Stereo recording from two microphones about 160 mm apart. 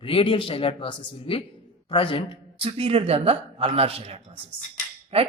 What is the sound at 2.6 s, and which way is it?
Speech, 35° right (ahead or behind).